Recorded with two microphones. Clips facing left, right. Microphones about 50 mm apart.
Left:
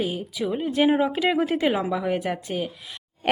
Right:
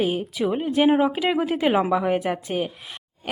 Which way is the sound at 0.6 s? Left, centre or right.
Centre.